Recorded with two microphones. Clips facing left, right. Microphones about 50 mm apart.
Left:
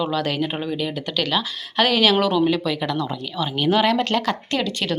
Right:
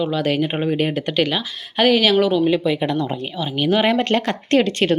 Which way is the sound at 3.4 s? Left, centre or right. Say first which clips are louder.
Even; centre.